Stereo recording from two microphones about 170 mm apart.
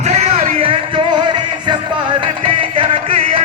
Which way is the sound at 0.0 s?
40° right (ahead or behind).